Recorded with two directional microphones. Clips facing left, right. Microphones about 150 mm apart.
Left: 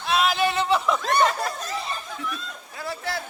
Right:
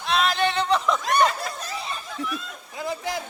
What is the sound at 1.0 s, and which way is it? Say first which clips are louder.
Snicker: even; 45° left (ahead or behind).